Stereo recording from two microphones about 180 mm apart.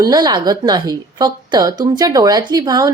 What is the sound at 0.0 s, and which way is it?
A woman's voice, 20° right (ahead or behind).